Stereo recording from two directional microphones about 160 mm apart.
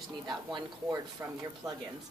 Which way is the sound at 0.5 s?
20° right (ahead or behind).